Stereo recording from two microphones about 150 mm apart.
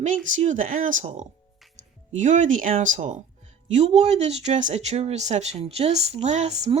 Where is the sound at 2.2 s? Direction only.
55° right (ahead or behind).